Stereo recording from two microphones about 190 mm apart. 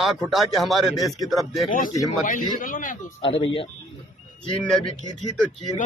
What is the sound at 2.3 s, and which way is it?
Speech, 45° left (ahead or behind).